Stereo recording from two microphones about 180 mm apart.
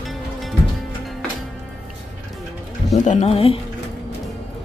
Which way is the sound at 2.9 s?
40° left (ahead or behind).